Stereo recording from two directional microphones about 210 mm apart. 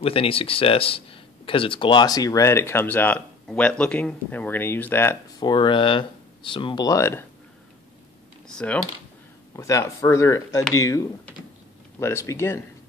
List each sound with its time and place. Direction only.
0.0 s speech: 25° left (ahead or behind)
8.5 s speech: 5° left (ahead or behind)
9.6 s speech: 15° left (ahead or behind)